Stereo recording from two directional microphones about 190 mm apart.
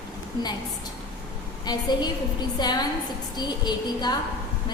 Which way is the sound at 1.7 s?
20° left (ahead or behind).